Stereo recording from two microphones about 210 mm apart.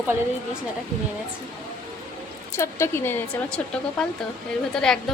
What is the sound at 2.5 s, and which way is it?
A woman's voice, 10° left (ahead or behind).